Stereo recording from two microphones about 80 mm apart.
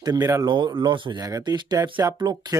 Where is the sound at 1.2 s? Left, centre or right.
Right.